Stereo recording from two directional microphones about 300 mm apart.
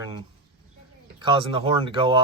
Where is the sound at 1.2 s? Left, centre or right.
Centre.